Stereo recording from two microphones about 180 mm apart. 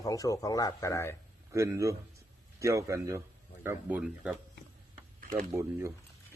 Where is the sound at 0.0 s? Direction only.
20° left (ahead or behind).